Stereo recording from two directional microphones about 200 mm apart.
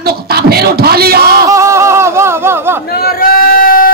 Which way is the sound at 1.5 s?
15° right (ahead or behind).